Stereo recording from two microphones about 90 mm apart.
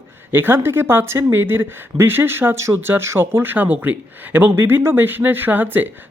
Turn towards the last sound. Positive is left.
turn(degrees=-20)  # may be behind; listen again after turning